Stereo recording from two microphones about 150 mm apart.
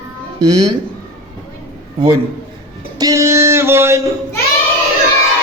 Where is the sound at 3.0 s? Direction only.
20° right (ahead or behind).